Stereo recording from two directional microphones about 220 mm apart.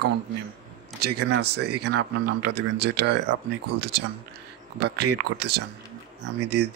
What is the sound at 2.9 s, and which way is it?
Speech, 50° right (ahead or behind).